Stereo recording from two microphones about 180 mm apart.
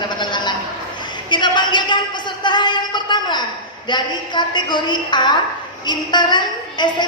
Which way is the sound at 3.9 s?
25° left (ahead or behind).